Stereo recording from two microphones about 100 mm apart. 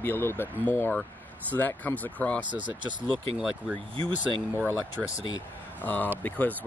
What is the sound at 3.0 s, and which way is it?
Speech, 10° right (ahead or behind).